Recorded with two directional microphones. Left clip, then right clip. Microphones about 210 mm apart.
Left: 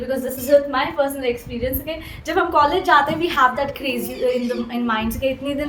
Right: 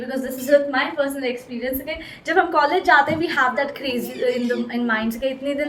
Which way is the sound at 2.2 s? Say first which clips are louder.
Left 1 dB; 15° left (ahead or behind).